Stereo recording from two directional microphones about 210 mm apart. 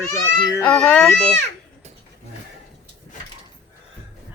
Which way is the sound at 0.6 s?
5° left (ahead or behind).